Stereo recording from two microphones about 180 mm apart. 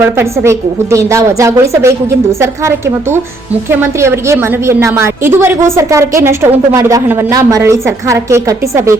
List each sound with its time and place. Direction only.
0.0 s a woman's voice: 15° right (ahead or behind)